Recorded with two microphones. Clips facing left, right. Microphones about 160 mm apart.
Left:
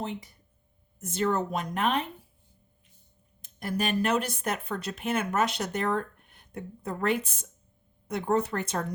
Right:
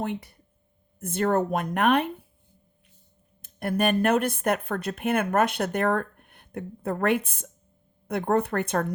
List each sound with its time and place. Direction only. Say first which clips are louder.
0.0 s speech: right 4 dB; 60° right (ahead or behind)
3.4 s speech: right 6 dB; 55° right (ahead or behind)